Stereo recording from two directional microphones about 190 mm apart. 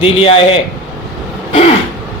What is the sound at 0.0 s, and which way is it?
Speech, 30° left (ahead or behind).